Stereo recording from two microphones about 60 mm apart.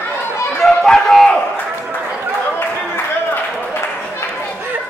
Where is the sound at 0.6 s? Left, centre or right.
Centre.